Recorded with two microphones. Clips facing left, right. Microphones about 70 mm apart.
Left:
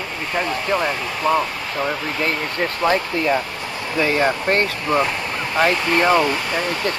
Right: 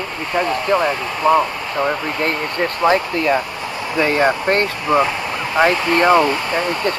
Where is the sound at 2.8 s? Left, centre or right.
Centre.